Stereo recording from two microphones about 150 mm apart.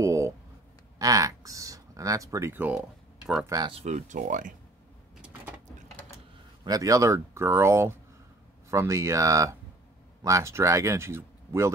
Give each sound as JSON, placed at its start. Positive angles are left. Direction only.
{"t": 0.0, "sound": "a sound", "side_deg": -20}
{"t": 0.9, "sound": "speech", "side_deg": -25}
{"t": 3.4, "sound": "speech", "side_deg": -25}
{"t": 3.7, "sound": "speech", "side_deg": -50}
{"t": 5.1, "sound": "a sound", "side_deg": -5}
{"t": 6.6, "sound": "speech", "side_deg": -25}